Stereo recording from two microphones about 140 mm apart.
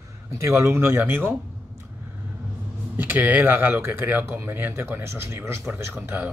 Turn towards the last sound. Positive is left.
turn(degrees=-10)  # may be behind; listen again after turning